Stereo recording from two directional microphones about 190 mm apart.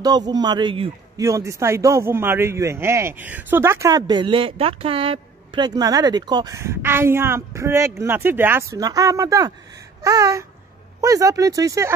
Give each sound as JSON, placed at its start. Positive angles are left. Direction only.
{"t": 0.0, "sound": "a man's voice", "side_deg": -20}